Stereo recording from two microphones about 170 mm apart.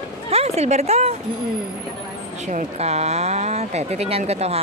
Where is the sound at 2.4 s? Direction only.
45° right (ahead or behind).